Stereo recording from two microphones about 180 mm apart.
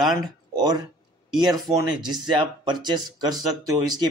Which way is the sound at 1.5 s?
20° right (ahead or behind).